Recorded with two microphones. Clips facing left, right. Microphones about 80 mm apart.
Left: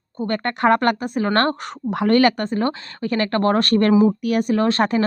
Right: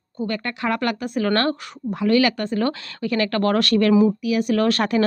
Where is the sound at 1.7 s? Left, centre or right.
Left.